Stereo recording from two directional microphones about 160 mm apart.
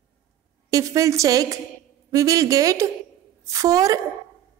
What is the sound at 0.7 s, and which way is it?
A woman's voice, 20° right (ahead or behind).